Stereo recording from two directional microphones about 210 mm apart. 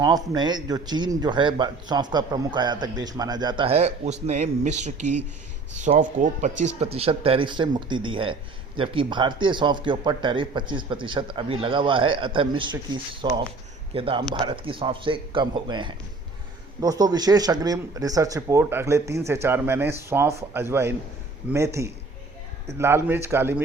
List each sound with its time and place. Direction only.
0.0 s speech: 20° right (ahead or behind)